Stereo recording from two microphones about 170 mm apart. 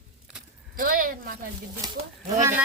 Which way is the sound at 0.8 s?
55° right (ahead or behind).